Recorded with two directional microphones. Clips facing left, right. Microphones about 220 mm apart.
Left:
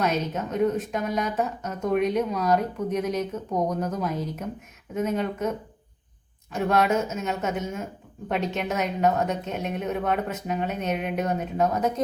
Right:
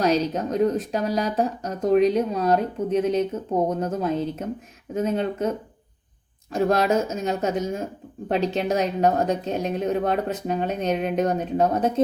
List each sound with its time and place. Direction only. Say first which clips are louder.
0.0 s speech: right 5 dB; 35° right (ahead or behind)